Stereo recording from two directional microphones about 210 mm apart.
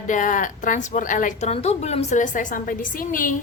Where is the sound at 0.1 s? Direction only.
40° left (ahead or behind).